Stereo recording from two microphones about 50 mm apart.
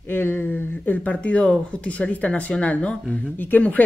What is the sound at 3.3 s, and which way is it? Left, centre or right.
Speech, left.